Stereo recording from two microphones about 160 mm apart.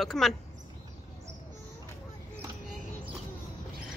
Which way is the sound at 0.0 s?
Centre (ahead or behind).